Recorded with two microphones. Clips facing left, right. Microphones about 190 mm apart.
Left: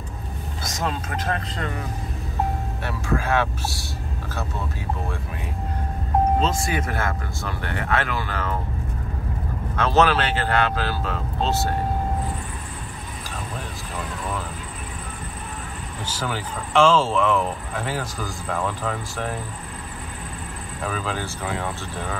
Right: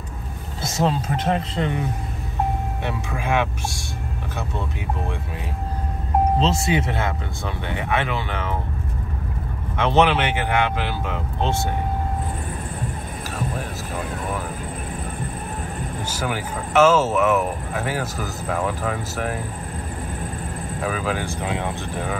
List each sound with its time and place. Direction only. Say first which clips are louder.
0.6 s vehicle: right 6 dB; 30° right (ahead or behind)
2.8 s speech: left 2 dB; 15° right (ahead or behind)
6.4 s speech: right 3 dB; 25° right (ahead or behind)
9.8 s speech: right 1 dB; 20° right (ahead or behind)
16.2 s speech: right 2 dB; 10° right (ahead or behind)
20.8 s speech: right 3 dB; 10° right (ahead or behind)